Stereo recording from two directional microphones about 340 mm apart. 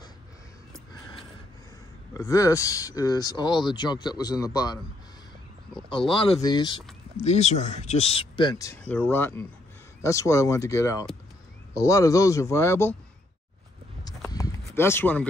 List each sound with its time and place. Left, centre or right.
2.1 s speech: centre
5.9 s speech: centre
14.3 s a sound: centre